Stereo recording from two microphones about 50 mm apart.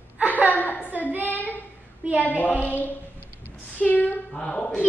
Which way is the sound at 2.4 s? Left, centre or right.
Left.